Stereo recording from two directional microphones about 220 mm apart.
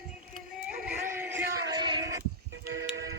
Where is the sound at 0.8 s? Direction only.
10° right (ahead or behind).